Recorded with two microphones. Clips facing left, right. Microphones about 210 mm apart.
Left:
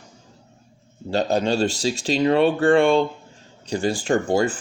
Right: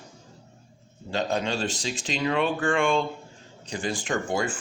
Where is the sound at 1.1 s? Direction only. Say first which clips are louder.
Left 6 dB; 35° left (ahead or behind).